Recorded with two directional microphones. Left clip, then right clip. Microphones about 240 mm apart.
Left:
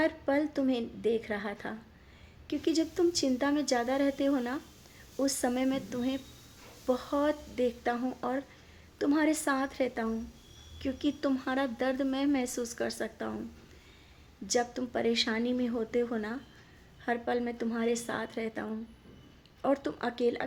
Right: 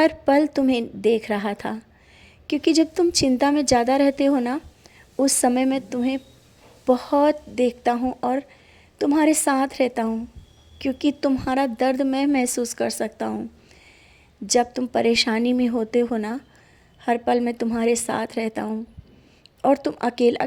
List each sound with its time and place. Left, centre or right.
0.0 s a woman's voice: right
14.4 s a woman's voice: right